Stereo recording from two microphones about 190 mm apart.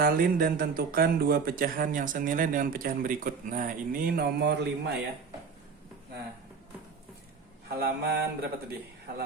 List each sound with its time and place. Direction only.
0.0 s a man's voice: 50° right (ahead or behind)
7.8 s mantra: 55° right (ahead or behind)